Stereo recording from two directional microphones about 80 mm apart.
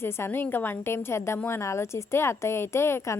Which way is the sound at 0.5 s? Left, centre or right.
Left.